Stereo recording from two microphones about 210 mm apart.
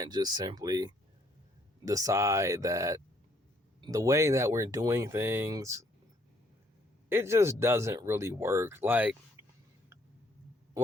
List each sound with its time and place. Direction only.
0.0 s speech: 20° right (ahead or behind)
7.1 s speech: 10° right (ahead or behind)